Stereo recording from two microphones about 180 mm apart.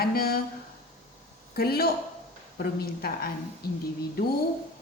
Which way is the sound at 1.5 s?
60° left (ahead or behind).